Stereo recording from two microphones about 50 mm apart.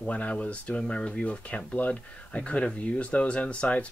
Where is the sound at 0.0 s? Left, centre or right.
Left.